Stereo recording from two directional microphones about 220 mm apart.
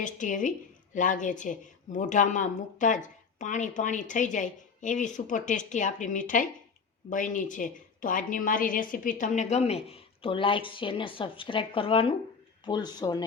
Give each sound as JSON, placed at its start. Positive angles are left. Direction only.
{"t": 0.0, "sound": "a woman's voice", "side_deg": 35}